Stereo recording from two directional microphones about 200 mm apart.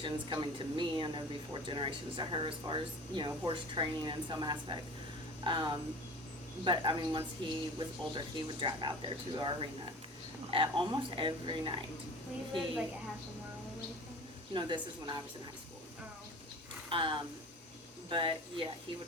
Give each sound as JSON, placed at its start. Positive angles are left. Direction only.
{"t": 0.0, "sound": "speech", "side_deg": -25}
{"t": 14.5, "sound": "speech", "side_deg": -25}
{"t": 16.9, "sound": "speech", "side_deg": -25}